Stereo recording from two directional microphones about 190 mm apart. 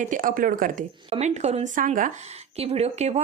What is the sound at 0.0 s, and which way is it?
Speech, 45° right (ahead or behind).